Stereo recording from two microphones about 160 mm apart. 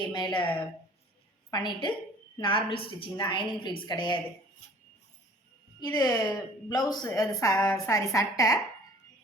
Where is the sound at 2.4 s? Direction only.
30° left (ahead or behind).